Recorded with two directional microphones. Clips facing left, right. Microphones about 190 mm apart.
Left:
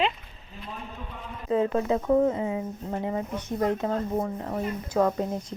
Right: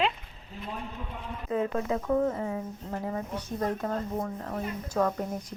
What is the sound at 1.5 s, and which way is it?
Speech, 30° left (ahead or behind).